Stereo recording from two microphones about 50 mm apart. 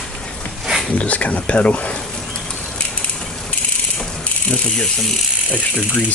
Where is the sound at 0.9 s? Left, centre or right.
Left.